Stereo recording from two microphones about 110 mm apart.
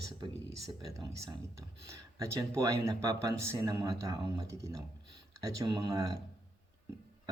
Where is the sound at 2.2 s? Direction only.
30° right (ahead or behind).